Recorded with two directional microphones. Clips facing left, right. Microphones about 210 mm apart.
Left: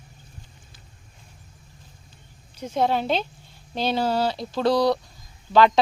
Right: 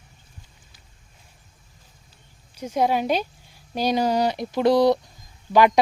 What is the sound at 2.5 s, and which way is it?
Speech, 10° right (ahead or behind).